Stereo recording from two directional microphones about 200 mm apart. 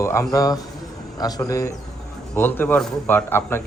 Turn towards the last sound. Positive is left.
turn(degrees=10)  # may be behind; listen again after turning